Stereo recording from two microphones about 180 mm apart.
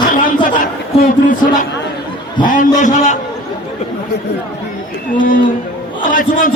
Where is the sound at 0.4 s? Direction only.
50° left (ahead or behind).